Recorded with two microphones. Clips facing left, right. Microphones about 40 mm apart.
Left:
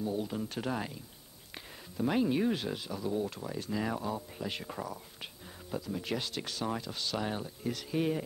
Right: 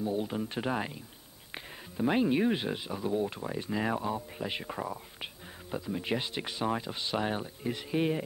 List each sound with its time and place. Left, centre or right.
0.0 s speech: right